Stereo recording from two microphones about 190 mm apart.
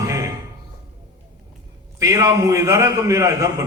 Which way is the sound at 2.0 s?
15° right (ahead or behind).